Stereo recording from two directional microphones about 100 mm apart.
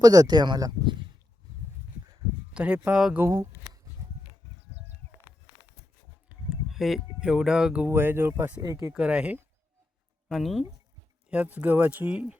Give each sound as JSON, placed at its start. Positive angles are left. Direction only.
{"t": 0.0, "sound": "speech", "side_deg": -40}
{"t": 2.5, "sound": "speech", "side_deg": -10}
{"t": 3.2, "sound": "a sound", "side_deg": -35}
{"t": 6.5, "sound": "speech", "side_deg": 0}
{"t": 7.9, "sound": "speech", "side_deg": -25}
{"t": 8.9, "sound": "speech", "side_deg": -10}
{"t": 10.2, "sound": "speech", "side_deg": 0}
{"t": 11.3, "sound": "speech", "side_deg": -15}